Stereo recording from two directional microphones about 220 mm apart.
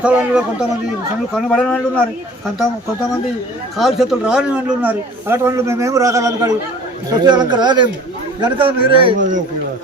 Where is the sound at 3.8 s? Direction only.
Centre (ahead or behind); by 9.1 s 25° right (ahead or behind).